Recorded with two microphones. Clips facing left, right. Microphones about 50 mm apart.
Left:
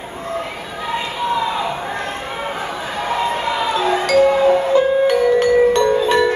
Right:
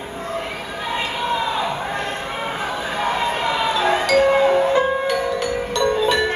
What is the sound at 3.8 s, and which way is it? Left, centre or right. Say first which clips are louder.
Music: left 3 dB; right.